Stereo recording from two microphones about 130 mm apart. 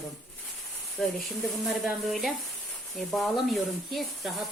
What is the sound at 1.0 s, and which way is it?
Speech, 10° left (ahead or behind).